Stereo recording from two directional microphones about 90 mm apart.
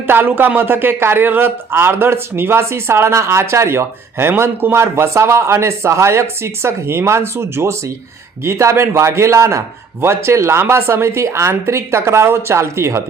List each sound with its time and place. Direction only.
0.1 s a man's voice: 25° right (ahead or behind)